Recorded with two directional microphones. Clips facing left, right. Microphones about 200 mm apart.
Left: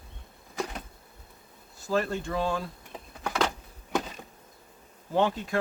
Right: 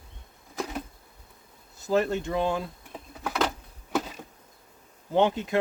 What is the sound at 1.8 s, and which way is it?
Speech, 20° right (ahead or behind).